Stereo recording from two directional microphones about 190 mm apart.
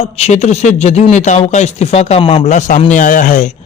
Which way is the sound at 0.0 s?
35° left (ahead or behind).